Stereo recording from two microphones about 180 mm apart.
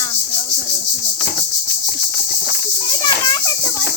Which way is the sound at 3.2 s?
20° left (ahead or behind).